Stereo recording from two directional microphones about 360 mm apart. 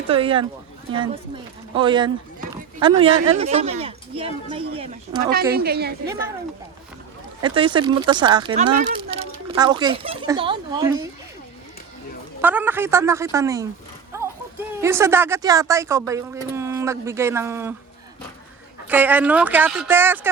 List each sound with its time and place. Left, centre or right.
0.1 s speech: centre
7.4 s speech: centre
12.4 s speech: centre
18.9 s speech: centre